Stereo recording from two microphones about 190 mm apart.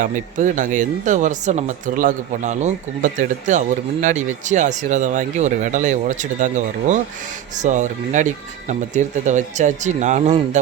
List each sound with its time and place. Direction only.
0.0 s speech: 40° right (ahead or behind)